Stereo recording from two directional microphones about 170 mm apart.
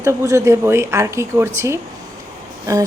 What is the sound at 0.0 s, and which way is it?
A woman's voice, 20° right (ahead or behind).